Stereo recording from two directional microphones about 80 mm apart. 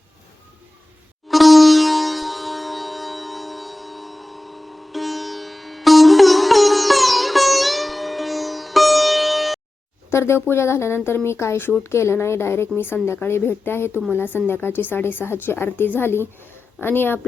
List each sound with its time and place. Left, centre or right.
1.3 s sitar: centre
10.1 s a woman's voice: left